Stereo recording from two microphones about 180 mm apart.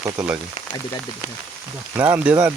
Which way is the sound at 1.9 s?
10° right (ahead or behind).